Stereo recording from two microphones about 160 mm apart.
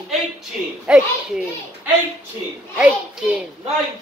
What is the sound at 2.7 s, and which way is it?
Speech, 10° right (ahead or behind).